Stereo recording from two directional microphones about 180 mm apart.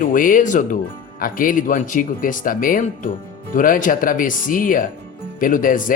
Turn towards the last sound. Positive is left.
turn(degrees=50)  # may be behind; listen again after turning